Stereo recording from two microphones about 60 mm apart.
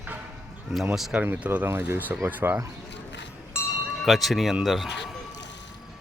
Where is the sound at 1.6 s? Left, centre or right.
Right.